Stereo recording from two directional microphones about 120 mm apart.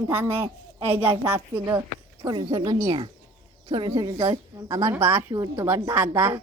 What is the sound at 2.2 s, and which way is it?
A woman's voice, 35° right (ahead or behind).